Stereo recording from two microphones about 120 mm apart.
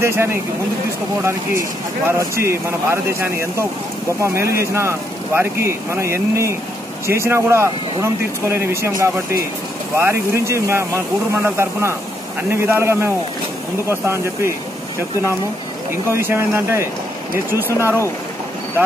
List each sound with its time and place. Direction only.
0.0 s speech: 20° right (ahead or behind)
15.9 s speech: 20° right (ahead or behind)